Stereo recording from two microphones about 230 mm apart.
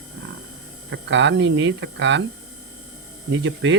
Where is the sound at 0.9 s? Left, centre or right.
Right.